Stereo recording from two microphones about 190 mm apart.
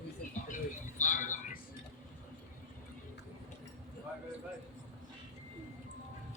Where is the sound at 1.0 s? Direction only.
45° left (ahead or behind).